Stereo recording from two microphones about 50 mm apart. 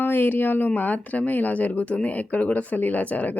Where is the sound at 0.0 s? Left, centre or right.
Left.